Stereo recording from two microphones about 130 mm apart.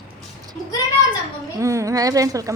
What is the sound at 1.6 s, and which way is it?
Speech, 25° right (ahead or behind).